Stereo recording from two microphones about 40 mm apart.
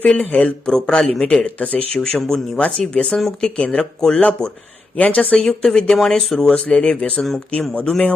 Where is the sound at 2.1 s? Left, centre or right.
Centre.